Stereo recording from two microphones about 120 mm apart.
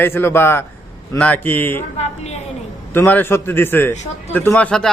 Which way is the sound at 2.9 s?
15° left (ahead or behind).